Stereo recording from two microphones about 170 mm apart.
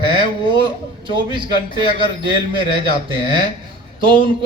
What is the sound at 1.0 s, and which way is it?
Speech, 30° right (ahead or behind).